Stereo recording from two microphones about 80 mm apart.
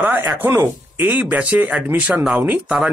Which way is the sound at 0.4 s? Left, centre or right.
Right.